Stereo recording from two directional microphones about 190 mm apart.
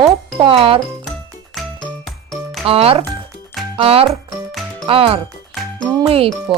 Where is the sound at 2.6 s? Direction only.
30° right (ahead or behind).